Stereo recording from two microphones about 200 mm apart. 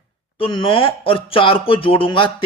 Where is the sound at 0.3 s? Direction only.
25° left (ahead or behind).